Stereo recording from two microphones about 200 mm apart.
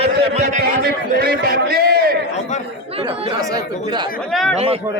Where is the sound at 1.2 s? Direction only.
50° right (ahead or behind).